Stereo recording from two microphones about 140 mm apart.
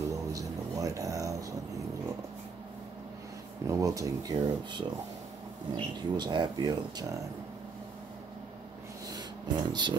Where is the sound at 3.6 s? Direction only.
25° right (ahead or behind).